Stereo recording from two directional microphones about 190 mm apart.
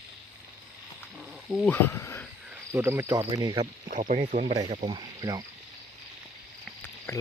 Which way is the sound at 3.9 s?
40° right (ahead or behind).